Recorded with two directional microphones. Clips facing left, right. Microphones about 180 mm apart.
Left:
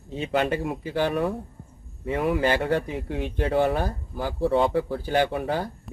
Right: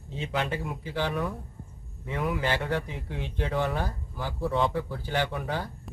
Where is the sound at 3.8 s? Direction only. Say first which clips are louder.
Left 5 dB; 45° left (ahead or behind).